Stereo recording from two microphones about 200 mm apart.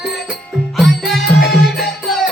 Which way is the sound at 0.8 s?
Centre (ahead or behind).